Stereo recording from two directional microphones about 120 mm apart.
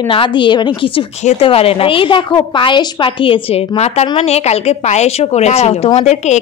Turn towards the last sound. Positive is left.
turn(degrees=70)  # may be behind; listen again after turning